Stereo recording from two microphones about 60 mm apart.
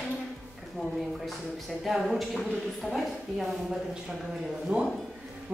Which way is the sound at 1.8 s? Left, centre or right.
Centre.